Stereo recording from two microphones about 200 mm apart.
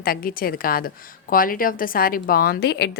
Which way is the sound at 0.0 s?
45° left (ahead or behind).